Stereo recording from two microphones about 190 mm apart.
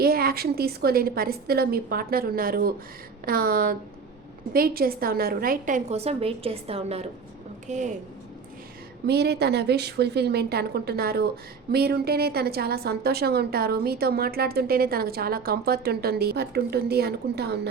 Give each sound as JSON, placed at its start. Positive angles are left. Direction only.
{"t": 0.0, "sound": "a woman's voice", "side_deg": -50}
{"t": 9.0, "sound": "a woman's voice", "side_deg": -60}